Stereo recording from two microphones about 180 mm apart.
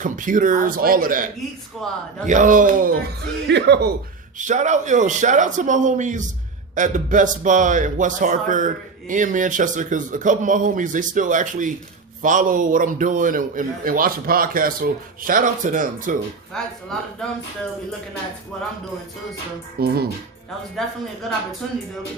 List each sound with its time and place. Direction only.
0.0 s a man's voice: 45° right (ahead or behind)
1.8 s speech: centre (ahead or behind)
2.2 s a man's voice: 45° right (ahead or behind)
3.2 s speech: 70° right (ahead or behind)
4.4 s a man's voice: 45° right (ahead or behind)
16.5 s speech: 5° left (ahead or behind)
18.5 s speech: 5° left (ahead or behind)
19.8 s speech: 60° right (ahead or behind)
20.8 s speech: centre (ahead or behind)